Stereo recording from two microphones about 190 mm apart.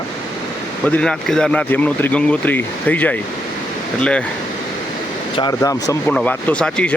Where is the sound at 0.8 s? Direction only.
5° left (ahead or behind).